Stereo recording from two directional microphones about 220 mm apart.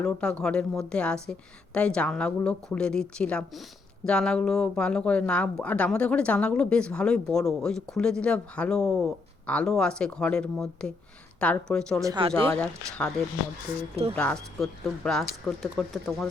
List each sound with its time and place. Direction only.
0.0 s speech: 5° left (ahead or behind)
12.0 s speech: 20° right (ahead or behind)
12.5 s speech: 5° left (ahead or behind)
13.9 s speech: 25° right (ahead or behind)
14.2 s speech: 5° left (ahead or behind)